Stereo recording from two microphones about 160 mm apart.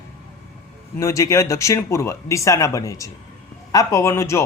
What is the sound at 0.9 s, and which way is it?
A man's voice, 20° left (ahead or behind).